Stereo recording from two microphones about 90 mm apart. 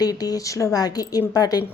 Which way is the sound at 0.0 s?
45° left (ahead or behind).